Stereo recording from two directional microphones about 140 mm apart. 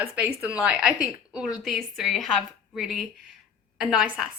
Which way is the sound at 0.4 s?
10° right (ahead or behind).